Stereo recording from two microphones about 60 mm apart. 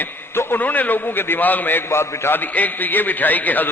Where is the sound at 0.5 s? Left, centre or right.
Left.